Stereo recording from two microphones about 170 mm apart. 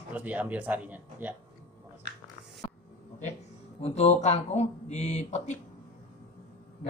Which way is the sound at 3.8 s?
40° left (ahead or behind).